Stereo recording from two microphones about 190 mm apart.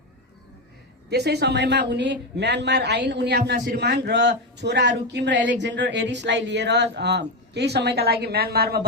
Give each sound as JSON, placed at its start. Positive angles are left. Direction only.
{"t": 1.1, "sound": "speech", "side_deg": -60}